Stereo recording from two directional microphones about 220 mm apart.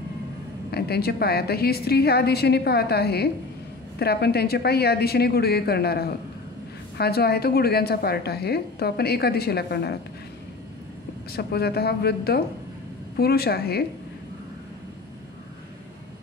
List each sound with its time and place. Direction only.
0.7 s a woman's voice: 45° left (ahead or behind)
11.3 s a woman's voice: 45° left (ahead or behind)